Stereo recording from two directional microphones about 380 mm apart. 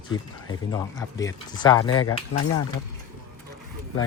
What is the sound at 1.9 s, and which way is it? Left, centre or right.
Speech, left.